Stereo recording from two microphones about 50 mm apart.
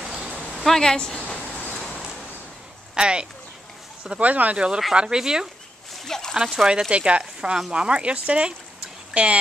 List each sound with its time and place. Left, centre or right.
0.0 s a sound: centre
0.7 s speech: centre
2.9 s speech: centre
4.2 s speech: right
4.9 s speech: centre
6.0 s speech: centre
6.3 s speech: centre